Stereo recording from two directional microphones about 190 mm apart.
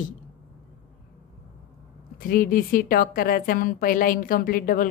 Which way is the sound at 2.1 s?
50° left (ahead or behind).